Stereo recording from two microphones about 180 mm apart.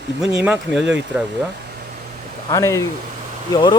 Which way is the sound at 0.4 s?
5° right (ahead or behind).